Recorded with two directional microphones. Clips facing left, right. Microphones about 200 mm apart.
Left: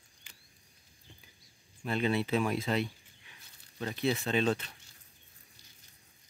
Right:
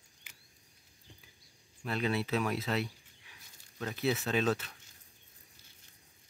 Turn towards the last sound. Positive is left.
turn(degrees=-5)  # may be behind; listen again after turning